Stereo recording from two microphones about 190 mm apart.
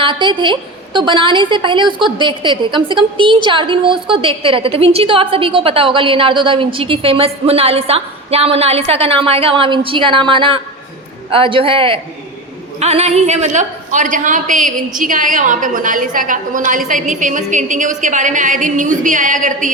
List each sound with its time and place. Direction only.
0.0 s a woman's voice: 25° right (ahead or behind); by 19.7 s 40° right (ahead or behind)